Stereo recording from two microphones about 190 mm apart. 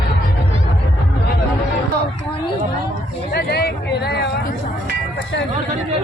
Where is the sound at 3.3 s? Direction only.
55° left (ahead or behind).